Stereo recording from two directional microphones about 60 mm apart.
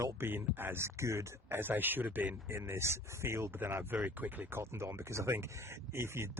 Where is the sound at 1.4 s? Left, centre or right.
Right.